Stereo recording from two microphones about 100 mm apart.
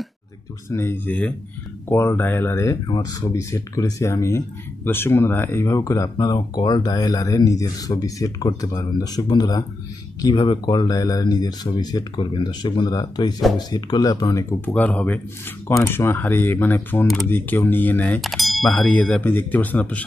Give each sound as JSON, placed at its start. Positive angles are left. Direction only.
{"t": 0.7, "sound": "speech", "side_deg": 25}
{"t": 14.7, "sound": "speech", "side_deg": 15}
{"t": 15.7, "sound": "speech", "side_deg": 25}
{"t": 18.2, "sound": "a sound", "side_deg": 0}
{"t": 18.7, "sound": "speech", "side_deg": 15}